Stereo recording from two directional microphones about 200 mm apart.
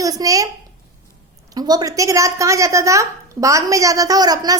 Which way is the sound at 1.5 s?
20° right (ahead or behind).